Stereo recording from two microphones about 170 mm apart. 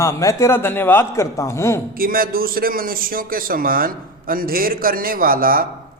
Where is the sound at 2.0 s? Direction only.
60° right (ahead or behind).